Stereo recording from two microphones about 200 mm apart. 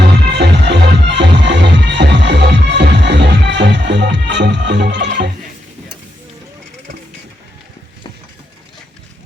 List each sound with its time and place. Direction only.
0.2 s music: 55° right (ahead or behind)